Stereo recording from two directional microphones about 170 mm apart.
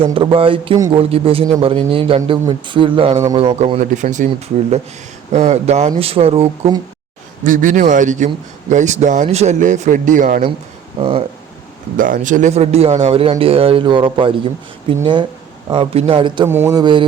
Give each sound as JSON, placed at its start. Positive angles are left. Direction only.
{"t": 0.0, "sound": "speech", "side_deg": -30}
{"t": 3.8, "sound": "speech", "side_deg": -45}
{"t": 5.3, "sound": "speech", "side_deg": -40}
{"t": 7.4, "sound": "speech", "side_deg": -50}
{"t": 11.9, "sound": "a man's voice", "side_deg": -55}
{"t": 16.5, "sound": "speech", "side_deg": -15}
{"t": 16.8, "sound": "a man's voice", "side_deg": -30}